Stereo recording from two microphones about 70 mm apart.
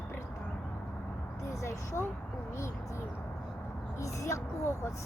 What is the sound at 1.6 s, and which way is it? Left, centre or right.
Speech, left.